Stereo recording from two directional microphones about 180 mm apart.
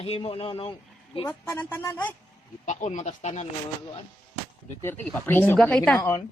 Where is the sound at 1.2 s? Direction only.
10° left (ahead or behind).